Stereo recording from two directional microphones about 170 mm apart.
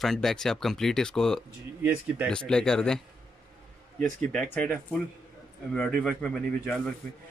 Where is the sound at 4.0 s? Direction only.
5° left (ahead or behind).